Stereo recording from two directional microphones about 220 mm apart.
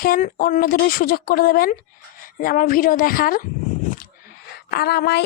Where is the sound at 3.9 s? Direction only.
40° left (ahead or behind).